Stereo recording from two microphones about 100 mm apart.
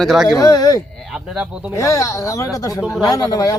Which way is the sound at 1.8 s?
35° left (ahead or behind).